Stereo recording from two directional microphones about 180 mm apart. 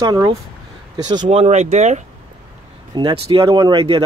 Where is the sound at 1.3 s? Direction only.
35° right (ahead or behind).